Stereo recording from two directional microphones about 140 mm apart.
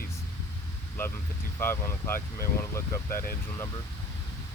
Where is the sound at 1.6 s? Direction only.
20° left (ahead or behind).